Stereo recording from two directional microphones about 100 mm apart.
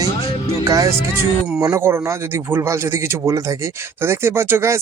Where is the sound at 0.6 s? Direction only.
30° right (ahead or behind).